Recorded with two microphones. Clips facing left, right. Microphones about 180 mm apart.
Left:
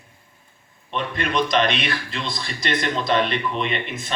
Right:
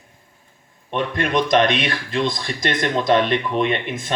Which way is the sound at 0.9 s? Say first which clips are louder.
Right 4 dB; 50° right (ahead or behind).